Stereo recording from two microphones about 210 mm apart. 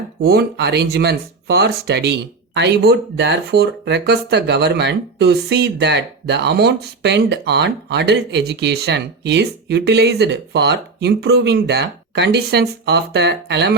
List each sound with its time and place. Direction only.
0.2 s speech: 50° right (ahead or behind)